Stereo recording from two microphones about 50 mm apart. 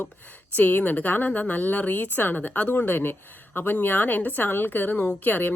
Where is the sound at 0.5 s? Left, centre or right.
Left.